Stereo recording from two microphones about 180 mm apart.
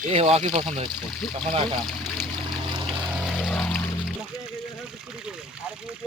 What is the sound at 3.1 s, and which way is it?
Pour, centre (ahead or behind).